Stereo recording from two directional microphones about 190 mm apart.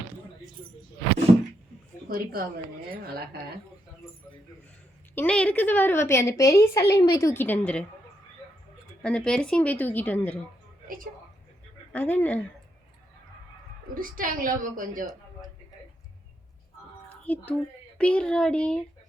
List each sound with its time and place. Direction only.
2.0 s a woman's voice: 50° right (ahead or behind)
5.1 s a woman's voice: 5° left (ahead or behind)
9.0 s a woman's voice: 5° left (ahead or behind)
10.8 s a woman's voice: 45° right (ahead or behind)
11.9 s a woman's voice: 10° left (ahead or behind)
13.9 s a woman's voice: 45° right (ahead or behind)
17.1 s a sound: 10° left (ahead or behind)
17.9 s speech: 5° left (ahead or behind)